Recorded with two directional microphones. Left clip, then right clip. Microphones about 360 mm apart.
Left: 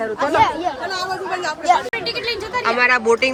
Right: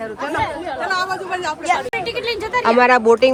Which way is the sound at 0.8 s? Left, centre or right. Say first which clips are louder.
Right 3 dB; right.